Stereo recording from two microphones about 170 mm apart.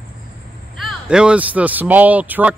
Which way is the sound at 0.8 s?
Centre (ahead or behind).